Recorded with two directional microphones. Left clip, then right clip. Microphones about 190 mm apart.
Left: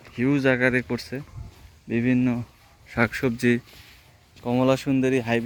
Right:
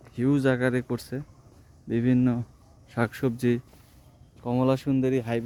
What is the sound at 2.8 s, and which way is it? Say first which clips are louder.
Speech: left 4 dB; 15° right (ahead or behind).